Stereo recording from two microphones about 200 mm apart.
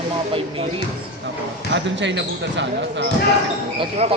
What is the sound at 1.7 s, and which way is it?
Speech, 65° right (ahead or behind).